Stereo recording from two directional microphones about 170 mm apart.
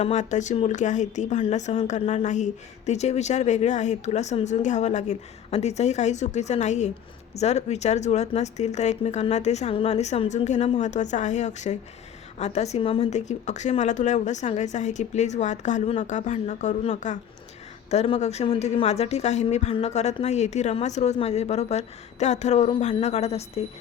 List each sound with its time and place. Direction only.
0.0 s speech: 45° left (ahead or behind)